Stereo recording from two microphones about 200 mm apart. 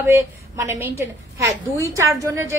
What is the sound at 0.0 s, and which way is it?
A woman's voice, 10° right (ahead or behind).